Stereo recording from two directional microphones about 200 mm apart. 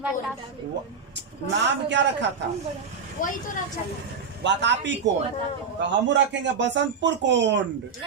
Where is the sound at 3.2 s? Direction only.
45° left (ahead or behind).